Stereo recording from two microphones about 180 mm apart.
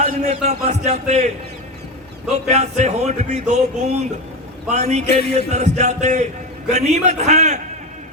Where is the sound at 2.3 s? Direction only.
40° right (ahead or behind).